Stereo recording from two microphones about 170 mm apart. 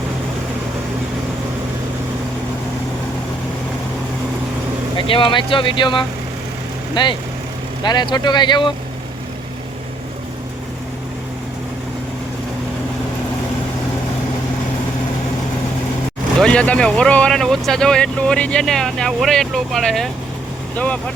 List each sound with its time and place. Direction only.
4.9 s speech: 30° left (ahead or behind)
16.4 s speech: 5° left (ahead or behind)